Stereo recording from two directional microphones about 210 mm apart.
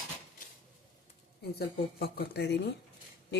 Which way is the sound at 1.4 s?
50° left (ahead or behind).